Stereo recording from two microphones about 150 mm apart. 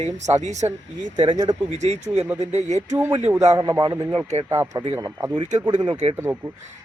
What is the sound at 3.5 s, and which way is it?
Speech, 25° right (ahead or behind).